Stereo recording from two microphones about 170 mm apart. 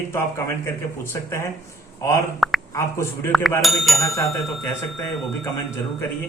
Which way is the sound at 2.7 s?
15° left (ahead or behind).